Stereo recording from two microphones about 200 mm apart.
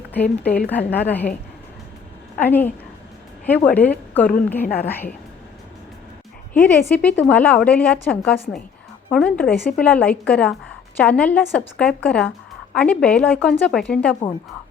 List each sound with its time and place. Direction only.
0.1 s a woman's voice: 10° left (ahead or behind)
2.4 s a woman's voice: 10° left (ahead or behind)
4.6 s a woman's voice: 50° left (ahead or behind)
4.9 s a woman's voice: 10° left (ahead or behind)
6.5 s a woman's voice: 5° left (ahead or behind)